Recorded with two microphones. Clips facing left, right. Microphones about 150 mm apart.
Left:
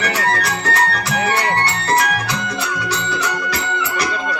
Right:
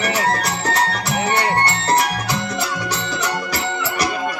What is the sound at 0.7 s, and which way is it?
Music, 20° right (ahead or behind).